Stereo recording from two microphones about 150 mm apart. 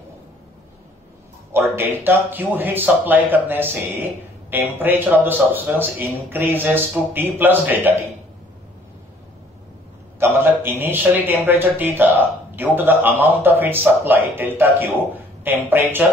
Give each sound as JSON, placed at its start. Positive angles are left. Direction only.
{"t": 1.5, "sound": "a man's voice", "side_deg": -15}
{"t": 10.1, "sound": "a sound", "side_deg": -15}
{"t": 11.2, "sound": "a man's voice", "side_deg": -10}